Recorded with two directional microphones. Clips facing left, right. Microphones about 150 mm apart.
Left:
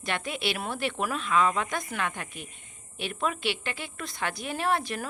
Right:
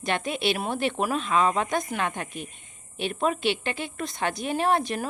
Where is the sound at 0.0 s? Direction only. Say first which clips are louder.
Right 5 dB; 20° right (ahead or behind).